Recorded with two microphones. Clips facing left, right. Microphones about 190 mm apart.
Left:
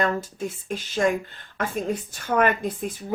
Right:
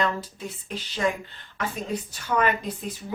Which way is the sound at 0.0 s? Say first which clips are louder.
Left 3 dB; 45° left (ahead or behind).